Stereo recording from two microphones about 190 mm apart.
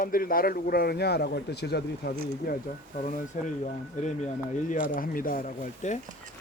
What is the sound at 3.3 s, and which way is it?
Speech, 40° left (ahead or behind).